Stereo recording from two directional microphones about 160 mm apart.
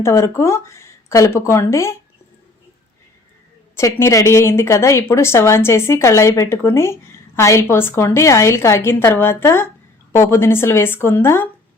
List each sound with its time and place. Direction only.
0.0 s speech: 20° left (ahead or behind)
3.8 s speech: 20° left (ahead or behind)